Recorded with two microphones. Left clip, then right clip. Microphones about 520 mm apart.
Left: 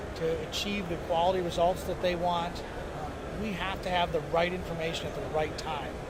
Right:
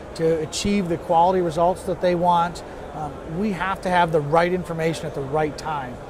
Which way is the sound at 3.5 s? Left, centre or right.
Right.